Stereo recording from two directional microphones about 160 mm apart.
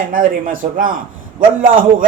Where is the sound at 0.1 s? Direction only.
60° right (ahead or behind).